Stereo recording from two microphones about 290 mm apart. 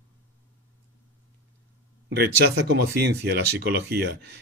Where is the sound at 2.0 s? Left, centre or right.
Right.